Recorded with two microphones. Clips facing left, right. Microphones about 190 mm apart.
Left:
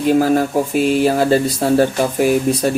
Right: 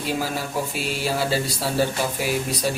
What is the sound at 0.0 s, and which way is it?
Speech, 50° left (ahead or behind).